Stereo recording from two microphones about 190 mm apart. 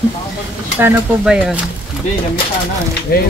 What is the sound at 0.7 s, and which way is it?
Speech, 10° right (ahead or behind).